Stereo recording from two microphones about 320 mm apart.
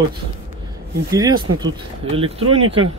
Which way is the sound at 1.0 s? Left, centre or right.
Centre.